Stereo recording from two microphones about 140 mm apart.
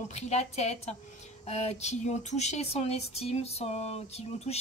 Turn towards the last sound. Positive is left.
turn(degrees=50)  # may be behind; listen again after turning